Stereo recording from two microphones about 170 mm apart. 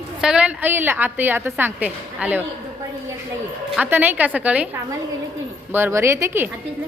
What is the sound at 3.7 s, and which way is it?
A woman's voice, 10° right (ahead or behind).